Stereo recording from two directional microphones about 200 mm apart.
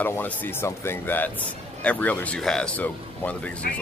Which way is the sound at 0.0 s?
10° left (ahead or behind).